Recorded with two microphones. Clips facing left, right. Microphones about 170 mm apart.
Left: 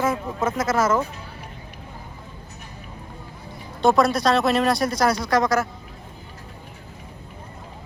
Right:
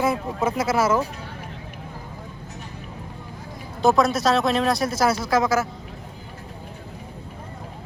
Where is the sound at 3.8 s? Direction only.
Centre (ahead or behind).